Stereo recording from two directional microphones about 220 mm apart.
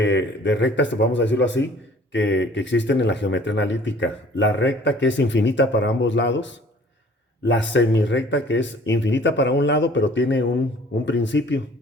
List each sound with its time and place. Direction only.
0.0 s speech: 55° left (ahead or behind)